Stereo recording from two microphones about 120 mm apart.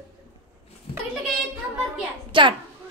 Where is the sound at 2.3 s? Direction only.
45° right (ahead or behind).